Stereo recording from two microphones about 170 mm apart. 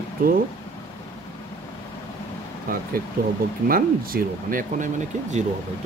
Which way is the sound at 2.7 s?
60° right (ahead or behind).